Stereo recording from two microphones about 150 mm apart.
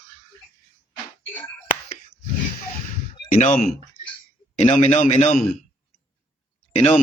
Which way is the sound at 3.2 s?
55° left (ahead or behind).